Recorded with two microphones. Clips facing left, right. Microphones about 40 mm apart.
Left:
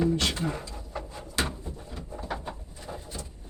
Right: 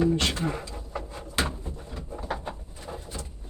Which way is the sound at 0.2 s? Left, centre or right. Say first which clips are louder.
Right 1 dB; right.